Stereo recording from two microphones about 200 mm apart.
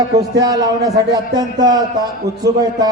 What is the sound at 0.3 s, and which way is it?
A man's voice, 20° right (ahead or behind).